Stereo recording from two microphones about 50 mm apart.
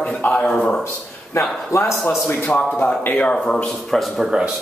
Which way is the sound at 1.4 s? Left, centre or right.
Left.